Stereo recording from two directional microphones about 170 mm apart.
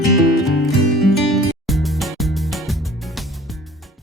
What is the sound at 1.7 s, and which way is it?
Music, centre (ahead or behind).